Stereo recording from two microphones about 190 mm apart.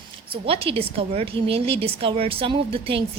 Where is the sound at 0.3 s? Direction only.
30° right (ahead or behind).